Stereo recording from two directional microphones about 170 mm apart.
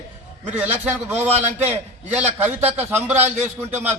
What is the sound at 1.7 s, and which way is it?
A man's voice, 10° right (ahead or behind).